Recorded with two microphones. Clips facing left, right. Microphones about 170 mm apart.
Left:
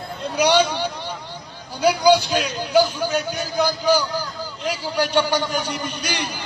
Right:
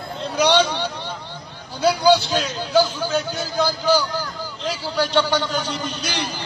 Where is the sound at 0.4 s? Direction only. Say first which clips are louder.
Even; 10° left (ahead or behind).